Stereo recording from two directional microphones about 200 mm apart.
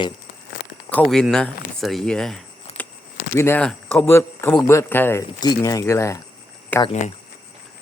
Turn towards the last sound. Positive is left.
turn(degrees=35)  # may be behind; listen again after turning